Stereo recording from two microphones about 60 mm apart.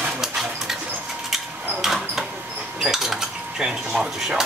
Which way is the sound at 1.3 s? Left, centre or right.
Centre.